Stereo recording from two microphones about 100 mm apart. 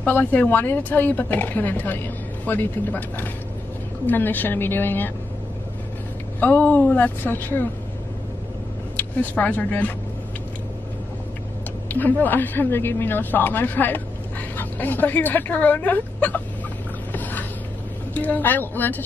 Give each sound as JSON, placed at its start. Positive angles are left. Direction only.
{"t": 0.0, "sound": "speech", "side_deg": 20}
{"t": 6.4, "sound": "speech", "side_deg": 15}
{"t": 8.9, "sound": "speech", "side_deg": 15}
{"t": 11.9, "sound": "speech", "side_deg": 20}
{"t": 17.1, "sound": "a sound", "side_deg": 15}
{"t": 18.1, "sound": "speech", "side_deg": 15}